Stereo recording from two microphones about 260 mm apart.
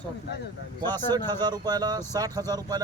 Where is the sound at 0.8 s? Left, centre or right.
Centre.